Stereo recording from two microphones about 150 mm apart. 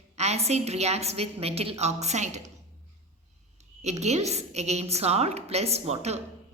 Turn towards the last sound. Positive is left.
turn(degrees=-45)  # may be behind; listen again after turning